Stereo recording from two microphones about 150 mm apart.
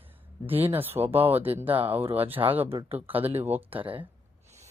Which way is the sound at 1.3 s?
40° right (ahead or behind).